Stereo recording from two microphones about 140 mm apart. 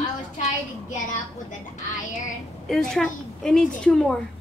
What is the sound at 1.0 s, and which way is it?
Speech, 65° left (ahead or behind).